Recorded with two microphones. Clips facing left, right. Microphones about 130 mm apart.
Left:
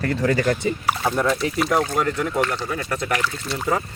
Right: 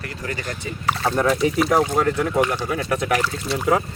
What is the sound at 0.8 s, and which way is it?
Speech, 5° left (ahead or behind).